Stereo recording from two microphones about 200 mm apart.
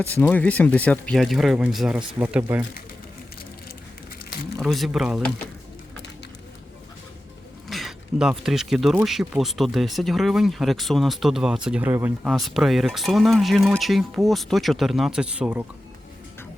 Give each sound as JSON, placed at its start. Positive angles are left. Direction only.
{"t": 0.1, "sound": "speech", "side_deg": 10}
{"t": 4.6, "sound": "speech", "side_deg": 0}
{"t": 7.7, "sound": "a sound", "side_deg": 0}
{"t": 9.0, "sound": "speech", "side_deg": 0}